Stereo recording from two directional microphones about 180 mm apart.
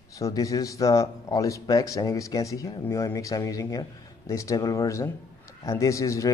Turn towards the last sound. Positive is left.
turn(degrees=20)  # may be behind; listen again after turning